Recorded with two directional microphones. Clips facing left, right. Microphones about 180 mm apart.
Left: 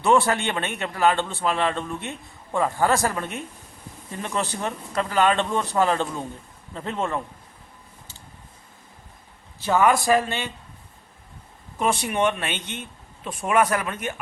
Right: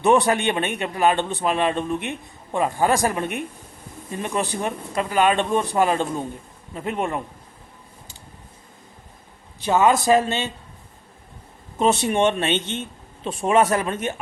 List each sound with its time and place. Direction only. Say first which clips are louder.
0.0 s a man's voice: right 2 dB; 15° right (ahead or behind)
9.6 s a man's voice: right 2 dB; 20° right (ahead or behind)
11.8 s a man's voice: right 4 dB; 25° right (ahead or behind)